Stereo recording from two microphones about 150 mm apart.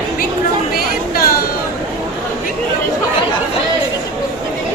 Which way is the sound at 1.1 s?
80° left.